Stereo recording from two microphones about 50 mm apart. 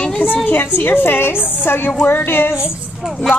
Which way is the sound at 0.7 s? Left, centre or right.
Left.